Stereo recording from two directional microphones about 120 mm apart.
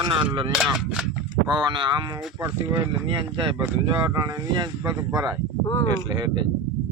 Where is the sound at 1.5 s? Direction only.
40° right (ahead or behind).